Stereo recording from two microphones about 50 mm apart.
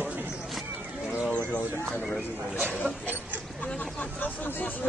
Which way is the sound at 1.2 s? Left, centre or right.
Left.